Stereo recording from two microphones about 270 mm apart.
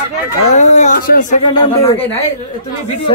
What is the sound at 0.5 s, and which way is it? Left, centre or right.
Speech, left.